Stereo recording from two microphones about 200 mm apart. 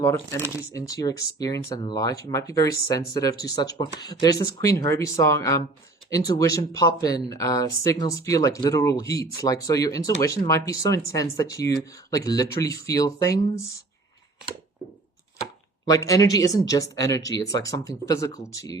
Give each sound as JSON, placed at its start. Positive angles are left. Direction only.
{"t": 0.0, "sound": "speech", "side_deg": 15}
{"t": 15.9, "sound": "speech", "side_deg": 15}